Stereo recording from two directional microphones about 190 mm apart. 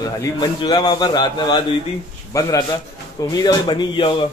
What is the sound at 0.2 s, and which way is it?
A man's voice, 20° left (ahead or behind).